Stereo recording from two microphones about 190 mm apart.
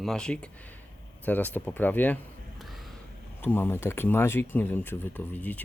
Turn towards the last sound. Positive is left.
turn(degrees=10)  # may be behind; listen again after turning